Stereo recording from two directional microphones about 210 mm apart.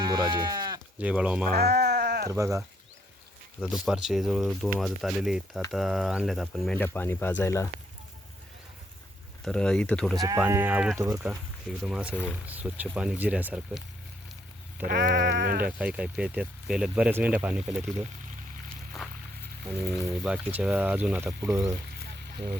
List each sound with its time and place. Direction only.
0.0 s sheep: 20° right (ahead or behind)
0.9 s speech: 5° right (ahead or behind)
1.5 s sheep: 50° right (ahead or behind)
2.3 s speech: 15° right (ahead or behind)
3.6 s speech: centre (ahead or behind)
9.4 s speech: 5° left (ahead or behind)
10.2 s speech: 15° right (ahead or behind)
14.8 s sheep: 50° right (ahead or behind)
15.8 s speech: 5° right (ahead or behind)
20.2 s speech: 5° right (ahead or behind)
22.0 s a sound: 50° right (ahead or behind)